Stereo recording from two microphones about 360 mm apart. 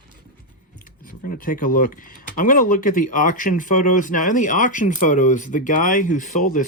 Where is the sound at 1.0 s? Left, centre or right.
Left.